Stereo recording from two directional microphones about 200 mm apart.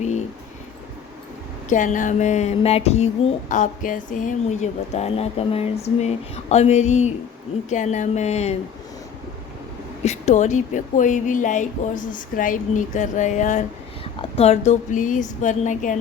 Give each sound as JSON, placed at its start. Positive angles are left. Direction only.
{"t": 1.7, "sound": "speech", "side_deg": 40}
{"t": 10.0, "sound": "speech", "side_deg": 35}